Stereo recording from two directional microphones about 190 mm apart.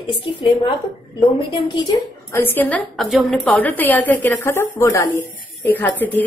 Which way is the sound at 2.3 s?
10° left (ahead or behind).